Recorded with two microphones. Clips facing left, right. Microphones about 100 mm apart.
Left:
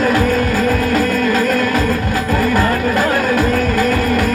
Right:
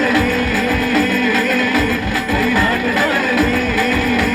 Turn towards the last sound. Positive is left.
turn(degrees=45)  # may be behind; listen again after turning